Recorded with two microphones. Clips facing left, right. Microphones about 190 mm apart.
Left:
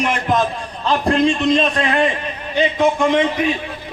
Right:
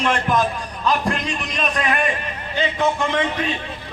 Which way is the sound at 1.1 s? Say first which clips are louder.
Left 10 dB; 30° left (ahead or behind).